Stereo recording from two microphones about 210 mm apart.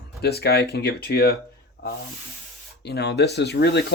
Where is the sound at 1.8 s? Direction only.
50° left (ahead or behind).